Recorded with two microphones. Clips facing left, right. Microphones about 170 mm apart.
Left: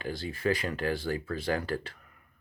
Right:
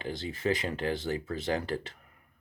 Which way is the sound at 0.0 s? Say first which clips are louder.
Left 1 dB; 20° right (ahead or behind).